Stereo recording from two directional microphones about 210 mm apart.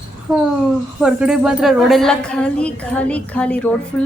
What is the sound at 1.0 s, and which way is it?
A woman's voice, 5° right (ahead or behind).